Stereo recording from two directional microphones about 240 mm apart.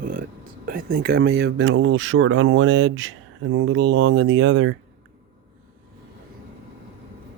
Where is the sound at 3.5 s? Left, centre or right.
Right.